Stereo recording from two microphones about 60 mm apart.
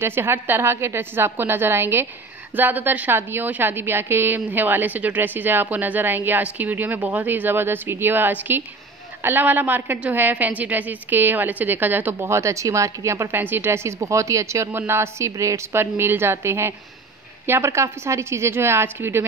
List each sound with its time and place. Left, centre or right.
0.0 s a woman's voice: right
13.3 s a woman's voice: right
14.7 s a woman's voice: right
15.7 s a woman's voice: right